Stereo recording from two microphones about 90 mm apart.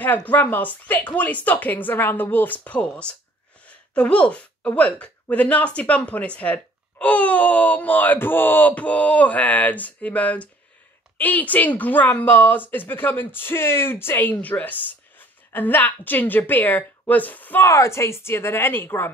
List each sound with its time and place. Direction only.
0.0 s a woman's voice: 20° left (ahead or behind)
17.6 s a woman's voice: 35° left (ahead or behind)